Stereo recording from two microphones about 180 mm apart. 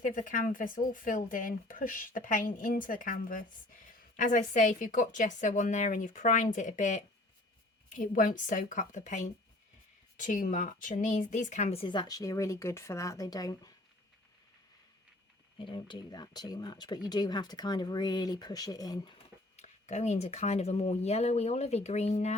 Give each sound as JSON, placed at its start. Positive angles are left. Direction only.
{"t": 0.0, "sound": "speech", "side_deg": 45}
{"t": 15.5, "sound": "speech", "side_deg": 30}
{"t": 19.5, "sound": "speech", "side_deg": 40}